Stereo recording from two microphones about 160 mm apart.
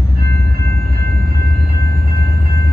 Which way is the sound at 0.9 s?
70° right (ahead or behind).